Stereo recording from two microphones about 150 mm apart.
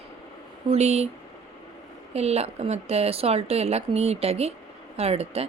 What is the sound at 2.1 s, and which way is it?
Speech, 45° right (ahead or behind).